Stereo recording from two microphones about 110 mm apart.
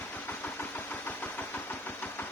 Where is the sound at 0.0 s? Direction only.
15° left (ahead or behind).